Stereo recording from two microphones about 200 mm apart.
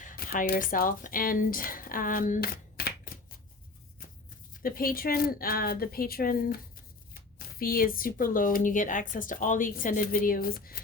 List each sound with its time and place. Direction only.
0.0 s speech: 45° left (ahead or behind)
4.6 s speech: 45° left (ahead or behind)